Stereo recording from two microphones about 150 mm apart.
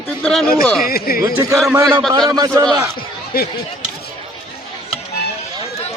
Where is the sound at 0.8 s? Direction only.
85° left.